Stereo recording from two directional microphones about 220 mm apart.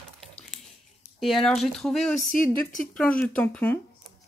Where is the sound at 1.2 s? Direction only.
Centre (ahead or behind).